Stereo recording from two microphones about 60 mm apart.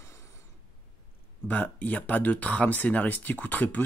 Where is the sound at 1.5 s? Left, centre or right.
Left.